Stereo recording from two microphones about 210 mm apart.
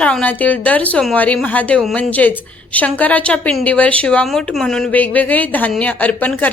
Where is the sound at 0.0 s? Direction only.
5° left (ahead or behind).